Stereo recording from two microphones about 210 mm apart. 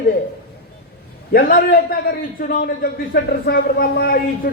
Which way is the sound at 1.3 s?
45° left (ahead or behind).